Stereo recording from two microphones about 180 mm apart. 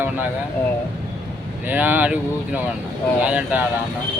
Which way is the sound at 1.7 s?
10° right (ahead or behind).